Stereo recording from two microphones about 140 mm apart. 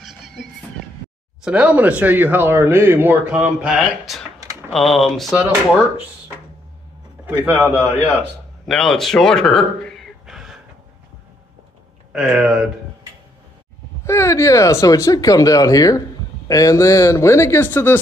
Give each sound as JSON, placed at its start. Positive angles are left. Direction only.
{"t": 1.4, "sound": "speech", "side_deg": -10}
{"t": 3.6, "sound": "speech", "side_deg": -5}
{"t": 7.4, "sound": "speech", "side_deg": -10}
{"t": 8.6, "sound": "a sound", "side_deg": 0}
{"t": 12.1, "sound": "speech", "side_deg": -5}
{"t": 14.0, "sound": "speech", "side_deg": 20}